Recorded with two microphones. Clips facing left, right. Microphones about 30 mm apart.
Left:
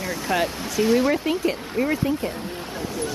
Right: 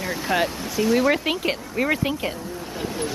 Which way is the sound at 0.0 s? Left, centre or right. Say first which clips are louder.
Right 1 dB; centre.